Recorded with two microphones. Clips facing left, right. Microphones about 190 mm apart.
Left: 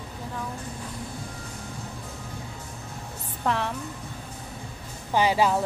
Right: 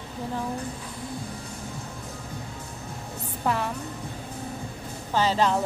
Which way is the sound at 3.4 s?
5° right (ahead or behind).